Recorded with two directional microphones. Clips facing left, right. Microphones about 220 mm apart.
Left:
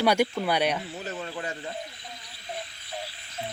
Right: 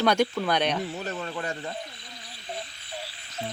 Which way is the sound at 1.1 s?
60° right (ahead or behind).